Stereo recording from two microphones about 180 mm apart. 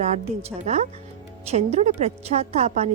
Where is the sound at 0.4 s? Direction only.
40° right (ahead or behind).